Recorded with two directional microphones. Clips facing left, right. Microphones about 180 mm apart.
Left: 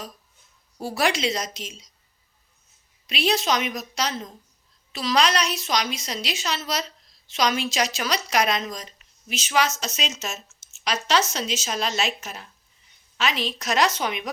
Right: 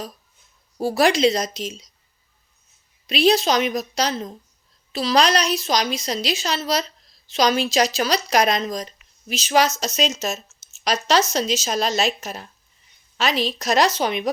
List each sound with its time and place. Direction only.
0.8 s a woman's voice: 35° right (ahead or behind)
3.1 s a woman's voice: 35° right (ahead or behind)